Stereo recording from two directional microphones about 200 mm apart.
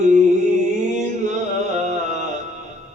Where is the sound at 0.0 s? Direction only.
35° right (ahead or behind).